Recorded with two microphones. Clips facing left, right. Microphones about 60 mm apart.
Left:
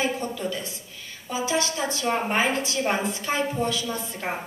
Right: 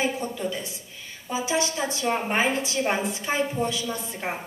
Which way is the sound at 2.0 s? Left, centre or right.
Centre.